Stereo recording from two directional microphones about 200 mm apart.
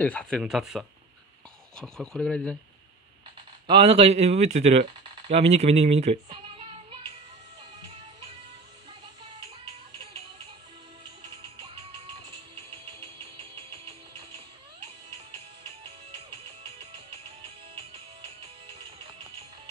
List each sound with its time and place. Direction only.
0.0 s speech: 5° left (ahead or behind)
3.6 s speech: 25° right (ahead or behind)
13.0 s a sound: 25° right (ahead or behind)
17.4 s music: 25° right (ahead or behind)